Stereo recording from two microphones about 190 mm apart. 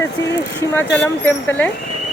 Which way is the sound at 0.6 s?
10° left (ahead or behind).